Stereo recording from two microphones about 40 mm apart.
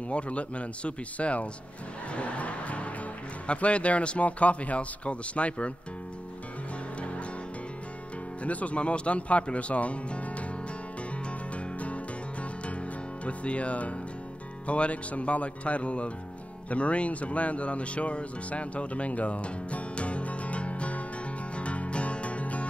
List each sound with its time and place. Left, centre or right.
0.1 s speech: left
2.1 s music: left
3.4 s speech: left
8.5 s speech: left
11.2 s music: left
14.7 s speech: left
21.5 s music: left